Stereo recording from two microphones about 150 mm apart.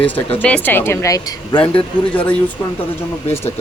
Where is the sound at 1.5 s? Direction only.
30° left (ahead or behind).